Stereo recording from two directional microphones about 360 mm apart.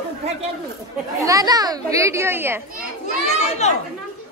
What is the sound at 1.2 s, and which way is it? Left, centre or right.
Speech, centre.